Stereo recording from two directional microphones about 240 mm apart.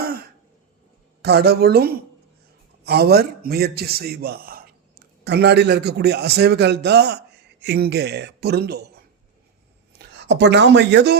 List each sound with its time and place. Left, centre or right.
1.2 s a man's voice: right